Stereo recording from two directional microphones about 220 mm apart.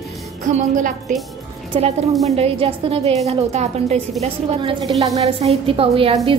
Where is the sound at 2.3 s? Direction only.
25° right (ahead or behind).